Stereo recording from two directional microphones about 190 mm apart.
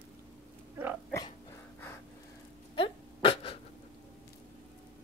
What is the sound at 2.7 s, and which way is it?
Dog, 30° left (ahead or behind).